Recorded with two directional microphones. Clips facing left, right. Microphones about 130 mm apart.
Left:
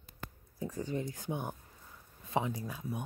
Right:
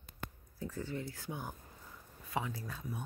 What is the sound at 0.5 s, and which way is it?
Speech, 15° left (ahead or behind).